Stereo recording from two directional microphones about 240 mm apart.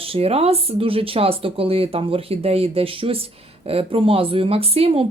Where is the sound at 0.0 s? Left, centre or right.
Right.